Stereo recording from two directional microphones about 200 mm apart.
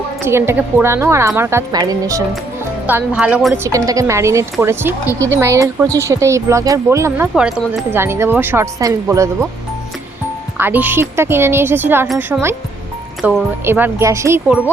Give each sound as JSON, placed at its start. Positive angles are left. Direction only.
{"t": 0.3, "sound": "a woman's voice", "side_deg": -10}
{"t": 10.6, "sound": "a woman's voice", "side_deg": -10}